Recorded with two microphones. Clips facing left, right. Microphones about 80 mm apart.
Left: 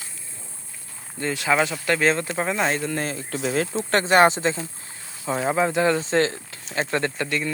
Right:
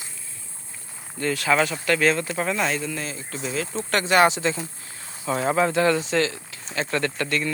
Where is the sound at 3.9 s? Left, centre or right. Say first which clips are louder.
Left 2 dB; left.